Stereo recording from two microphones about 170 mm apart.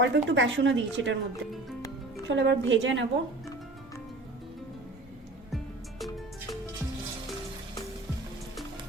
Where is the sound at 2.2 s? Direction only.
90° right.